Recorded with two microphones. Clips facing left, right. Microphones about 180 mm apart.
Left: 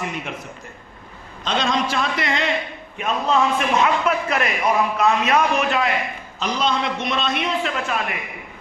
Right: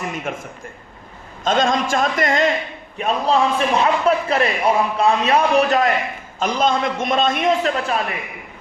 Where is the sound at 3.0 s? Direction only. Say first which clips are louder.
Right 2 dB; 35° right (ahead or behind).